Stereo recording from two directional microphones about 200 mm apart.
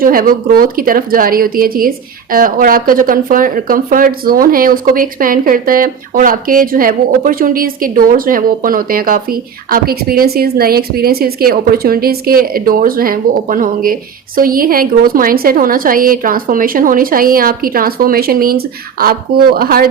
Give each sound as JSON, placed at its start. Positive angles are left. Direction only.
{"t": 0.0, "sound": "speech", "side_deg": -45}